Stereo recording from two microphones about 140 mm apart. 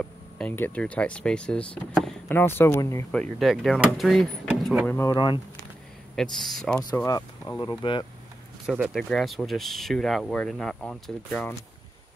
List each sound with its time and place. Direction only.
0.0 s speech: 10° left (ahead or behind)
3.1 s speech: 5° left (ahead or behind)
4.8 s speech: 15° left (ahead or behind)
5.1 s speech: 30° left (ahead or behind)
6.1 s speech: 5° left (ahead or behind)
7.1 s speech: 25° left (ahead or behind)
7.8 s speech: 35° left (ahead or behind)
8.6 s speech: 5° right (ahead or behind); by 11.6 s 15° left (ahead or behind)